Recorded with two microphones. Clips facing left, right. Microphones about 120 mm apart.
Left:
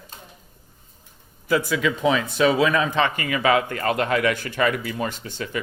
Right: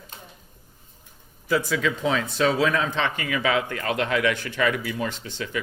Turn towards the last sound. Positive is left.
turn(degrees=45)  # may be behind; listen again after turning